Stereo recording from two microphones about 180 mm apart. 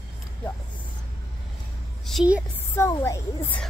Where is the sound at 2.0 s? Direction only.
5° right (ahead or behind).